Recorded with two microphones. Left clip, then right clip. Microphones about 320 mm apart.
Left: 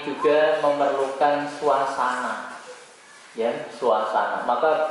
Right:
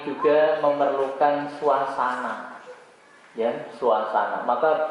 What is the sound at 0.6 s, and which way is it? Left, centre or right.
A man's voice, right.